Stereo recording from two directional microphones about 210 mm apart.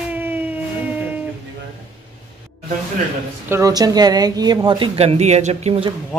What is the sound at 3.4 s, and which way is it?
Speech, 15° right (ahead or behind).